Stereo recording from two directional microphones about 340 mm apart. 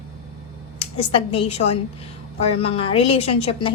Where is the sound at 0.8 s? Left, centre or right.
Centre.